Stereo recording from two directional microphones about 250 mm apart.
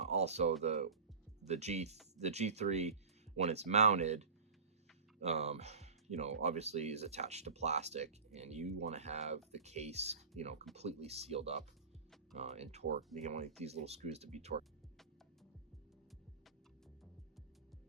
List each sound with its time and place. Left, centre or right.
0.0 s speech: right